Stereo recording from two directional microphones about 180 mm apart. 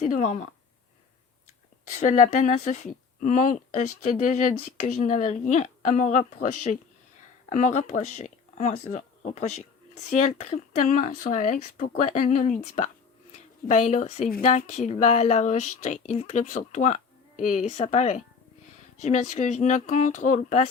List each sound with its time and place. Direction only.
0.0 s a woman's voice: 45° left (ahead or behind)
2.0 s a woman's voice: 40° left (ahead or behind)